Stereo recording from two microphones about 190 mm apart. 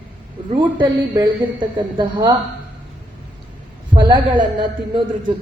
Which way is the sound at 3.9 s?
25° right (ahead or behind).